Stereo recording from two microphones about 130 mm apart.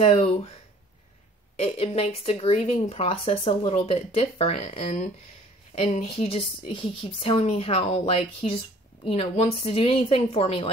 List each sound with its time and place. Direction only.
0.0 s speech: 50° left (ahead or behind)
1.6 s a woman's voice: 50° left (ahead or behind)